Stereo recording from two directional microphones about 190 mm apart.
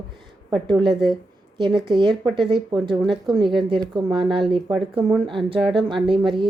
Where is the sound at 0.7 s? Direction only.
25° right (ahead or behind).